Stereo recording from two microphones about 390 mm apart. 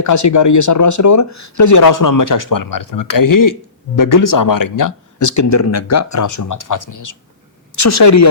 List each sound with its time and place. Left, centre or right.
0.0 s speech: left